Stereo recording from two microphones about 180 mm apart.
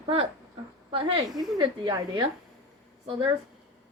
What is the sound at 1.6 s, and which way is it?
Speech, 25° right (ahead or behind).